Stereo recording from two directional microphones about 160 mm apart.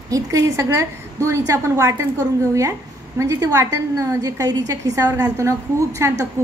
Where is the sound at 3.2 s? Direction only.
20° right (ahead or behind).